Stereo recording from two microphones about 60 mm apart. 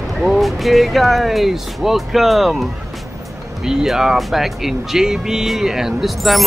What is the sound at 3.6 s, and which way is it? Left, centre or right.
Speech, centre.